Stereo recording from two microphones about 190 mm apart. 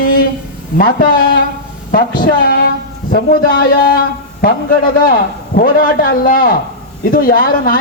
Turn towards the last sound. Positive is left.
turn(degrees=50)  # may be behind; listen again after turning